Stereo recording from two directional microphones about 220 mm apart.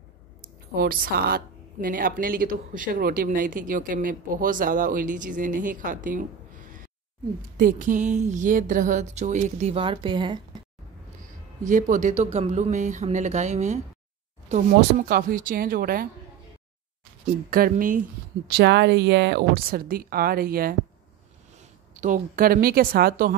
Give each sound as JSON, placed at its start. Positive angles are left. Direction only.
{"t": 0.7, "sound": "a woman's voice", "side_deg": -40}
{"t": 7.5, "sound": "a woman's voice", "side_deg": -35}
{"t": 11.2, "sound": "a woman's voice", "side_deg": -35}
{"t": 15.0, "sound": "a woman's voice", "side_deg": -40}
{"t": 17.5, "sound": "a woman's voice", "side_deg": -40}
{"t": 18.5, "sound": "speech", "side_deg": -50}
{"t": 22.0, "sound": "a woman's voice", "side_deg": -40}